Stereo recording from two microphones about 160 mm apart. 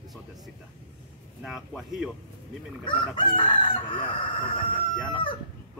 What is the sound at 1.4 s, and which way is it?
Speech, centre (ahead or behind).